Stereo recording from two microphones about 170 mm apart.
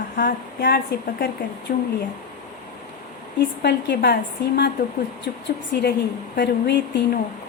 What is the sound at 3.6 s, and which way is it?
Speech, 85° left.